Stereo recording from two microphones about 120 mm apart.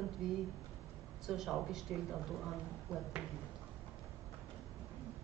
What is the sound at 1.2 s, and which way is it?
Speech, 5° right (ahead or behind).